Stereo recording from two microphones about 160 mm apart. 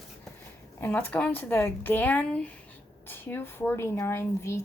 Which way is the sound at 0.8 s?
10° left (ahead or behind).